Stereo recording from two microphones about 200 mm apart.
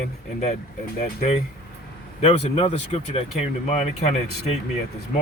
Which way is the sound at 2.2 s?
30° left (ahead or behind).